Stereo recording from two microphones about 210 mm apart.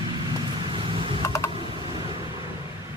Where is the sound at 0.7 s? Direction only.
25° right (ahead or behind).